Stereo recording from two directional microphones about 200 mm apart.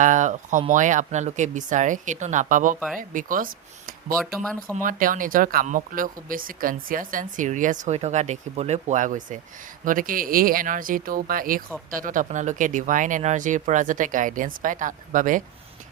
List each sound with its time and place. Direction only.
0.0 s speech: 40° right (ahead or behind)
4.2 s speech: centre (ahead or behind)
4.8 s speech: 45° right (ahead or behind)